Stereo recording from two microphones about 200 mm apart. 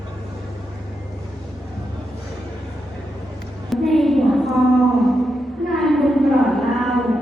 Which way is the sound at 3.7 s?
Centre (ahead or behind).